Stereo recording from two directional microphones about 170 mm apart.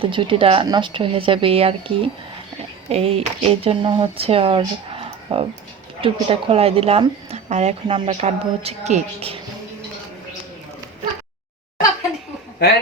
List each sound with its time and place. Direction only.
0.0 s speech: 30° right (ahead or behind)